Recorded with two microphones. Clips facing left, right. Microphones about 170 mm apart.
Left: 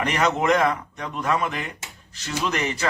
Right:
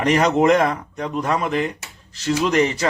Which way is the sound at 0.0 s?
35° right (ahead or behind).